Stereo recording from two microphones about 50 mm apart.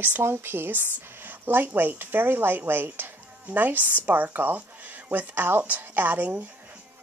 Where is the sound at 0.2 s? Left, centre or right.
Right.